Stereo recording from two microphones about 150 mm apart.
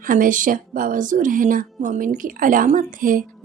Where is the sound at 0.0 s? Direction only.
65° right (ahead or behind).